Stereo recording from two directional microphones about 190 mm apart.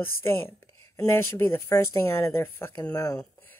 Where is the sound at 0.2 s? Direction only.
10° left (ahead or behind).